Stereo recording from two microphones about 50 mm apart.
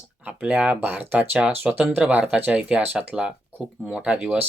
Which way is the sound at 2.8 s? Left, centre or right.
Right.